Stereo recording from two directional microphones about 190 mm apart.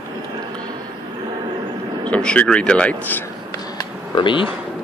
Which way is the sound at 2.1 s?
5° left (ahead or behind).